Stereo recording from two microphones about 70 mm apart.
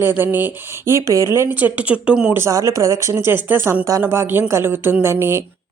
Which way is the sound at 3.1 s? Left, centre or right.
Right.